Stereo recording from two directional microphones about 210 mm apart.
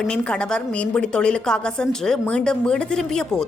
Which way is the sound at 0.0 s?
5° left (ahead or behind).